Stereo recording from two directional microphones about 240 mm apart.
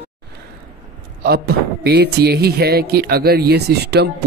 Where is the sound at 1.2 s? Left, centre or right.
Right.